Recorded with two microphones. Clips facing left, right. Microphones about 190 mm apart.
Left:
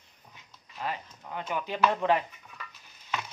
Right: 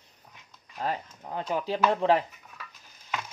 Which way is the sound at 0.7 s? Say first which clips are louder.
Right 4 dB; 40° right (ahead or behind).